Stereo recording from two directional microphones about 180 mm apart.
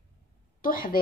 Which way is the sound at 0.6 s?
50° left (ahead or behind).